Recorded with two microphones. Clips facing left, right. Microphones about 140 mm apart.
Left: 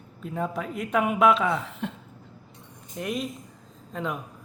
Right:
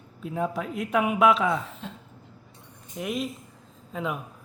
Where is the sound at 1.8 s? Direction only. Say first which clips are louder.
Left 6 dB; 60° left (ahead or behind).